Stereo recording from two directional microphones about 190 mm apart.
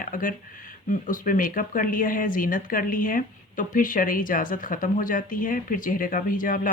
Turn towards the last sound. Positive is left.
turn(degrees=45)  # may be behind; listen again after turning